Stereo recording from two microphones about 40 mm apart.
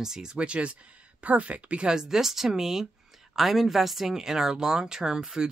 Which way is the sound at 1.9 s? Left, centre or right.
Centre.